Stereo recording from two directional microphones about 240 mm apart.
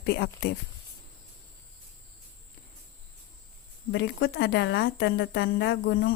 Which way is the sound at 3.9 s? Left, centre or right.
Left.